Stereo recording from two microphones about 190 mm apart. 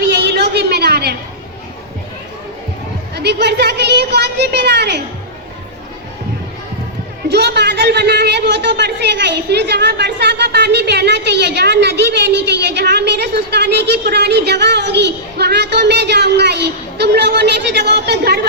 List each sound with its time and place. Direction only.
0.0 s a sound: 60° right (ahead or behind)
3.2 s a man's voice: 60° right (ahead or behind)
7.3 s a man's voice: 60° right (ahead or behind)